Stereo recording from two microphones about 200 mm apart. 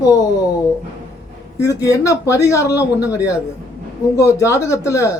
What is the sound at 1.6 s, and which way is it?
Speech, 15° left (ahead or behind).